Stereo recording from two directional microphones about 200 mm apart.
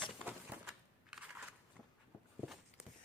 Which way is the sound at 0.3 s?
5° right (ahead or behind).